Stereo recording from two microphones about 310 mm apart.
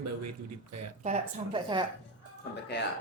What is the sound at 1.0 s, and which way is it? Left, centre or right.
Speech, centre.